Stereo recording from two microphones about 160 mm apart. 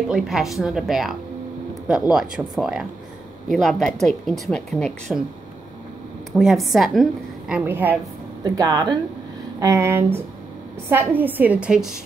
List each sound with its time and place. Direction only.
0.1 s speech: centre (ahead or behind)
6.3 s speech: centre (ahead or behind)
8.5 s a woman's voice: 25° right (ahead or behind); by 12.0 s 5° right (ahead or behind)